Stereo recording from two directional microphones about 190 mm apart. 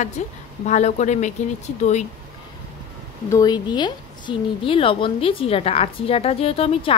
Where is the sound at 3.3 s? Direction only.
20° left (ahead or behind).